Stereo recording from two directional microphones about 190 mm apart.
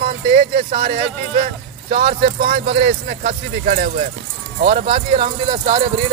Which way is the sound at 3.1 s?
50° right (ahead or behind).